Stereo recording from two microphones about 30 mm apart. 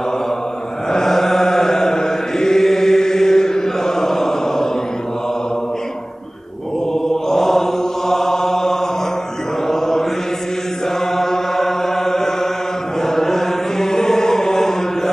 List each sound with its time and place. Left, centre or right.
0.9 s mantra: centre
6.9 s mantra: centre
11.1 s chant: centre